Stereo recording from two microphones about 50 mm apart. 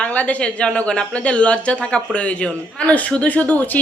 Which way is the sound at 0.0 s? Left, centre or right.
Left.